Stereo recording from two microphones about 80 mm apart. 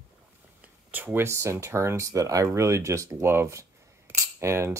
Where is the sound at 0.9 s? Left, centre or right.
Right.